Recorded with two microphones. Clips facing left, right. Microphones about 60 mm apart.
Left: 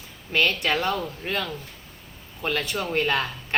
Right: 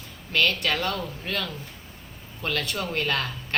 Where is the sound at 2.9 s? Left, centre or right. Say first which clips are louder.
Left 5 dB; centre.